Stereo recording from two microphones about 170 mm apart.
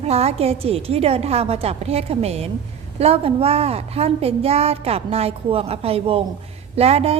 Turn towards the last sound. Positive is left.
turn(degrees=-35)  # may be behind; listen again after turning